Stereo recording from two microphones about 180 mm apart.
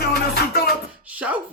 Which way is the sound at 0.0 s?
60° left (ahead or behind).